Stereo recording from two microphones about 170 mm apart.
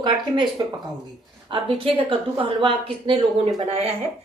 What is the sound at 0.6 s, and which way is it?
A woman's voice, 25° right (ahead or behind).